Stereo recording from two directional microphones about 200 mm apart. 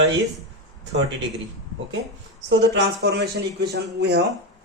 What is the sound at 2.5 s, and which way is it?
Speech, 60° right (ahead or behind).